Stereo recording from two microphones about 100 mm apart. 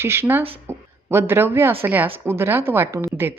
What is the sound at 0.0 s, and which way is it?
A woman's voice, 25° right (ahead or behind).